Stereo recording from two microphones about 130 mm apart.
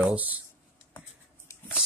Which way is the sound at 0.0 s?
10° right (ahead or behind).